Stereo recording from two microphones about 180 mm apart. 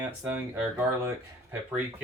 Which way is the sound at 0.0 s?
10° right (ahead or behind).